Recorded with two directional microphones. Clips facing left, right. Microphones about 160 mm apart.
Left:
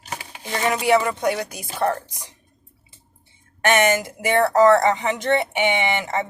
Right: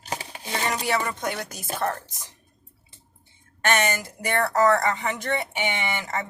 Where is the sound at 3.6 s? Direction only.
15° left (ahead or behind).